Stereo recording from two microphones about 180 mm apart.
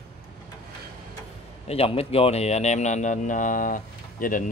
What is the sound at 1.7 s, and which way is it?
Speech, 35° left (ahead or behind).